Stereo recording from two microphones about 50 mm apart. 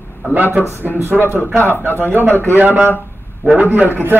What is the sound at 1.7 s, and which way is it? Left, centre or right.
Speech, left.